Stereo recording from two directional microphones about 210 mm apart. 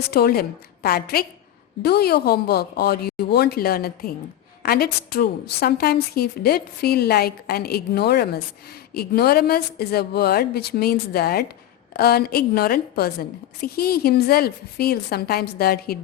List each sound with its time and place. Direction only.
0.1 s a woman's voice: 45° left (ahead or behind)